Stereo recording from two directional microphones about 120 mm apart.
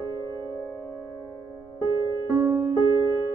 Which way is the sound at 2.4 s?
25° right (ahead or behind).